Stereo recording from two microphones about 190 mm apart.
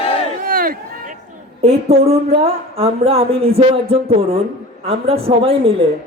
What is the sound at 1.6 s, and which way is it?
A woman's voice, 35° right (ahead or behind).